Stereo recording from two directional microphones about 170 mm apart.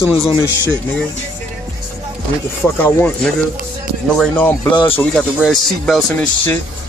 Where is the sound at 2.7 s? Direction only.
10° left (ahead or behind).